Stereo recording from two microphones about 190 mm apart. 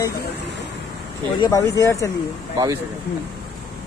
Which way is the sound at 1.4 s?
15° left (ahead or behind).